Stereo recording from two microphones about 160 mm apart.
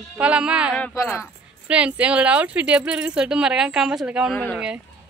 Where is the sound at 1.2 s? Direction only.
5° right (ahead or behind).